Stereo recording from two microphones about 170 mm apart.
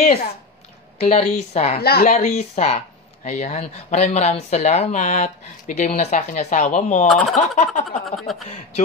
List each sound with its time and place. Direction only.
0.9 s a woman's voice: 35° left (ahead or behind)
1.8 s speech: 70° left (ahead or behind)
2.0 s a woman's voice: 40° left (ahead or behind)
7.1 s a sound: centre (ahead or behind)
7.3 s a woman's voice: 40° left (ahead or behind)
8.0 s a sound: centre (ahead or behind)